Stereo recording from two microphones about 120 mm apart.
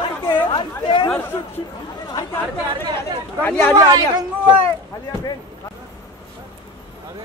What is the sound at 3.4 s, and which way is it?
Speech, 15° left (ahead or behind).